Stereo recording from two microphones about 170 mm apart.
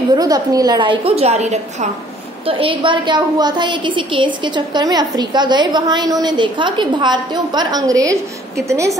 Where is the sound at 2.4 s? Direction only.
30° right (ahead or behind).